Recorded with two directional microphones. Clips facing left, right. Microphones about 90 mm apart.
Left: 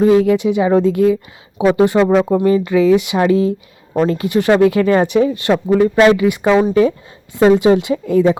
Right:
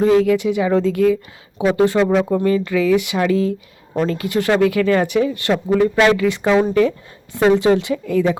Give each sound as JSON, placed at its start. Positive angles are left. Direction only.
{"t": 0.2, "sound": "speech", "side_deg": 25}